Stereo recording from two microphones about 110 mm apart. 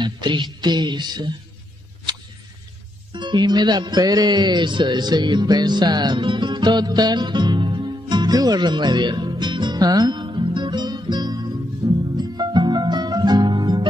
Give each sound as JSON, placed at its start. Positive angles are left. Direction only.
{"t": 0.0, "sound": "music", "side_deg": -45}
{"t": 3.1, "sound": "music", "side_deg": -45}